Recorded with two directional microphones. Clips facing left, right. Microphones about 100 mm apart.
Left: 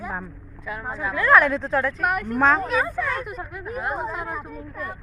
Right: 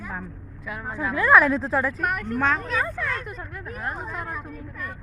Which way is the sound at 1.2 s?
5° right (ahead or behind).